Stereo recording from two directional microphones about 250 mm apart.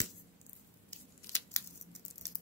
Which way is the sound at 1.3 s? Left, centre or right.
Centre.